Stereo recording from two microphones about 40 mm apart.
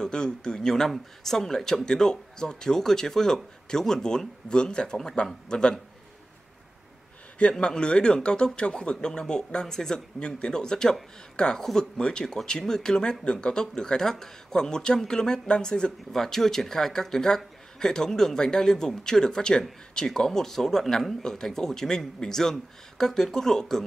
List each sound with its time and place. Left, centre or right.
0.0 s speech: centre
7.5 s speech: left
16.1 s speech: centre